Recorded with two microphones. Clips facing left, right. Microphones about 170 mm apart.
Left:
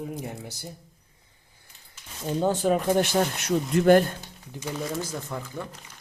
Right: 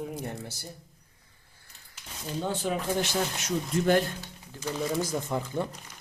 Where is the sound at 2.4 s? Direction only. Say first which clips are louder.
Left 7 dB; 45° left (ahead or behind).